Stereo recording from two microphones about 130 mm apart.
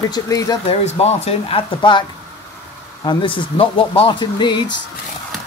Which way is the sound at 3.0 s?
40° left (ahead or behind).